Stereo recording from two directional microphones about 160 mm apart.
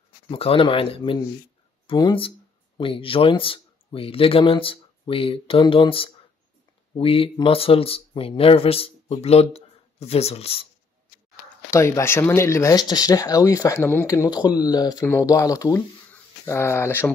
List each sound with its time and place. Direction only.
0.3 s speech: 35° left (ahead or behind)
11.7 s speech: 15° left (ahead or behind)